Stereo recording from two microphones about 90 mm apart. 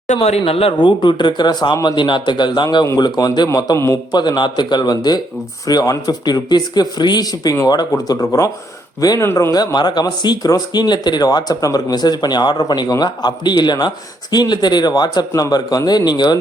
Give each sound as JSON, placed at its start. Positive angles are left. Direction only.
{"t": 0.2, "sound": "speech", "side_deg": 90}
{"t": 9.2, "sound": "speech", "side_deg": 25}
{"t": 9.5, "sound": "speech", "side_deg": 50}